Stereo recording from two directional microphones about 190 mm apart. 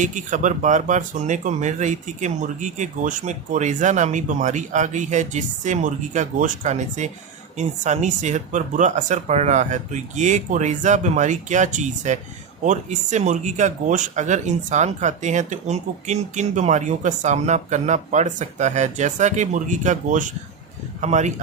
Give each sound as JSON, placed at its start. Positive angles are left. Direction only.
{"t": 0.0, "sound": "speech", "side_deg": -40}